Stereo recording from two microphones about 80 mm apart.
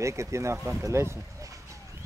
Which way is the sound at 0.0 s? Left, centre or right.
Right.